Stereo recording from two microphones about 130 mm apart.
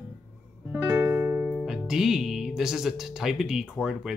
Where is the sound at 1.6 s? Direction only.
5° right (ahead or behind).